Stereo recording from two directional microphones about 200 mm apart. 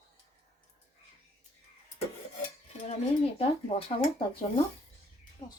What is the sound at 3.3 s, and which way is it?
Speech, 25° left (ahead or behind).